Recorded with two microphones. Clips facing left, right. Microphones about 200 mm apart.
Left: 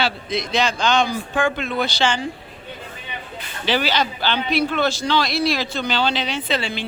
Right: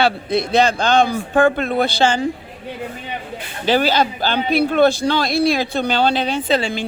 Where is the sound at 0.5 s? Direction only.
55° right (ahead or behind).